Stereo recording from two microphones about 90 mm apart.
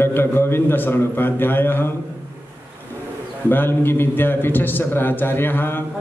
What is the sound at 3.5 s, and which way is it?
A man's voice, 25° left (ahead or behind).